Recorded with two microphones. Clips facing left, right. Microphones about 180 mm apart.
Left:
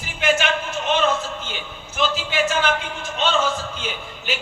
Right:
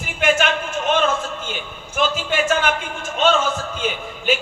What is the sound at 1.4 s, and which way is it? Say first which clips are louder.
A man's voice: right 3 dB; 50° right (ahead or behind).